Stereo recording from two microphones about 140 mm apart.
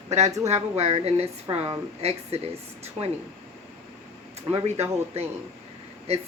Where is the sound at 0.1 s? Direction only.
55° right (ahead or behind).